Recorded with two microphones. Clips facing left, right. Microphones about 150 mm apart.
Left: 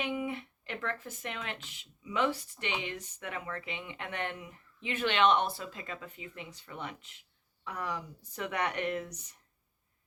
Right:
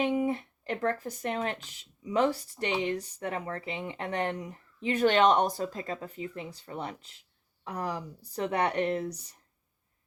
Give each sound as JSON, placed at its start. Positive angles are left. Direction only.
{"t": 0.0, "sound": "speech", "side_deg": -40}